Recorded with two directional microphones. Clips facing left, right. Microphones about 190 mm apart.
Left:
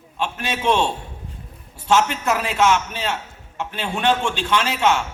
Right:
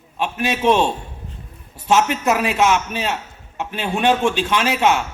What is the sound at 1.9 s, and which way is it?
A man's voice, 20° right (ahead or behind).